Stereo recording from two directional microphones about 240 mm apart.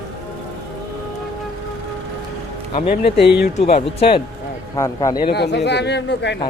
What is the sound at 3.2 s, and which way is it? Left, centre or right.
Speech, left.